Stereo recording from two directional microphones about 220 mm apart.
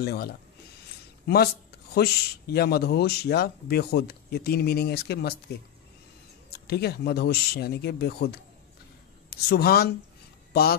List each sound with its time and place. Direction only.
0.0 s speech: 45° left (ahead or behind)
6.7 s speech: 45° left (ahead or behind)